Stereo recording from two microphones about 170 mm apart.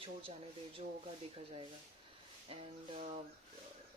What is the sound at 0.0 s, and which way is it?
Speech, 30° right (ahead or behind).